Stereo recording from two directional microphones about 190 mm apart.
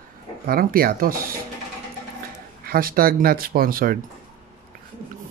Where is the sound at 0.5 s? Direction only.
50° right (ahead or behind).